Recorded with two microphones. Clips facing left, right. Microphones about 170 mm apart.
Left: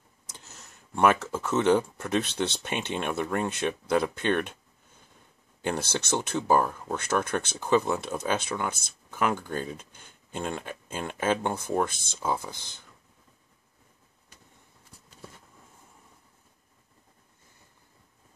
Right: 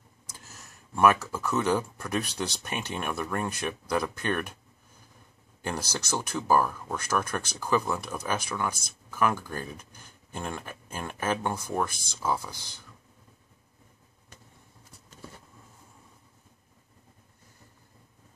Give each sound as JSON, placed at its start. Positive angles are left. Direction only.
{"t": 0.5, "sound": "a sound", "side_deg": 25}
{"t": 1.2, "sound": "speech", "side_deg": 25}
{"t": 5.6, "sound": "speech", "side_deg": 25}